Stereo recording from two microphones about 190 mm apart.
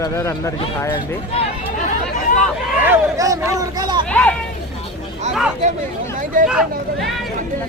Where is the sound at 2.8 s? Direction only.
15° right (ahead or behind).